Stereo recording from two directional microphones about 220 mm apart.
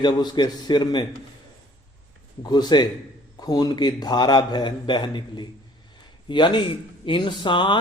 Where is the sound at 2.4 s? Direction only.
20° left (ahead or behind).